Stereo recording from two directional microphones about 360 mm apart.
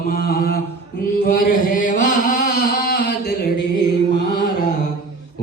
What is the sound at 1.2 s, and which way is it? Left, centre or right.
Chant, left.